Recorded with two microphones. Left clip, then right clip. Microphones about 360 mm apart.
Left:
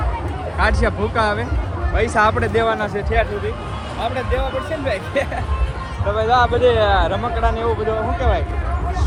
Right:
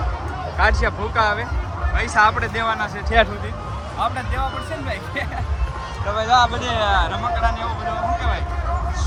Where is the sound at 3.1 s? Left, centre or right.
Centre.